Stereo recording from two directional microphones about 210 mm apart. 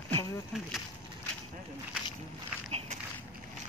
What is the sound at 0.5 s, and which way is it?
Speech, centre (ahead or behind).